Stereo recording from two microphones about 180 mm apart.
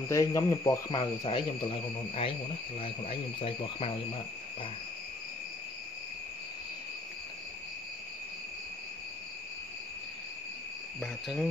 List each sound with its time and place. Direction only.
0.1 s speech: 15° left (ahead or behind)
11.0 s cricket: 5° left (ahead or behind)